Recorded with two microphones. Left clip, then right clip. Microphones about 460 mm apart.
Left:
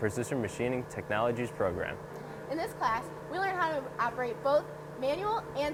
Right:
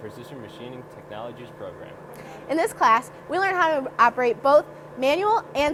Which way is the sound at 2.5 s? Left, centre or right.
Right.